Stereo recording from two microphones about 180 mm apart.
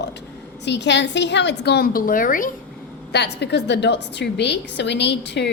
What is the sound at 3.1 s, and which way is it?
A woman's voice, 70° left (ahead or behind).